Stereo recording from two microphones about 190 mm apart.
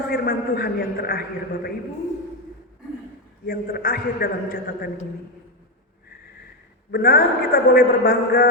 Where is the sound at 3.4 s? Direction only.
55° left (ahead or behind).